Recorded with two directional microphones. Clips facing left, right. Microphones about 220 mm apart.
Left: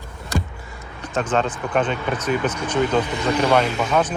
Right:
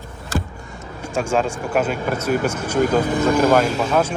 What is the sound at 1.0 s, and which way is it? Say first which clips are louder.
Speech: right 1 dB; 10° right (ahead or behind).